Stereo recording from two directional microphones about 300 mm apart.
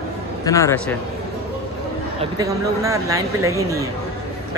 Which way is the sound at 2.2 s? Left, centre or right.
Centre.